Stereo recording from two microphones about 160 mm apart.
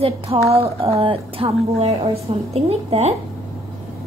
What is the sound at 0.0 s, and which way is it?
A woman's voice, 40° right (ahead or behind).